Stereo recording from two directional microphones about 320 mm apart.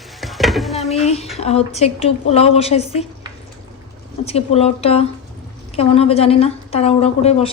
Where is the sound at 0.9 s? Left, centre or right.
Centre.